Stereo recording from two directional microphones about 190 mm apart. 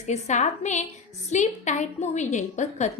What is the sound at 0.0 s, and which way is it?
A woman's voice, 40° left (ahead or behind).